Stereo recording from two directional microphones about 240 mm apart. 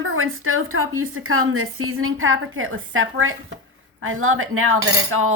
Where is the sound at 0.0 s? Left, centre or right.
Right.